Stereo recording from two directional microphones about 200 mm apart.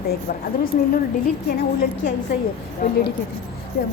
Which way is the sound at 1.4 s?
45° left (ahead or behind).